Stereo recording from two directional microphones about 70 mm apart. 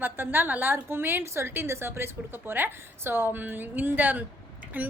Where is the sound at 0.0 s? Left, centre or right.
Right.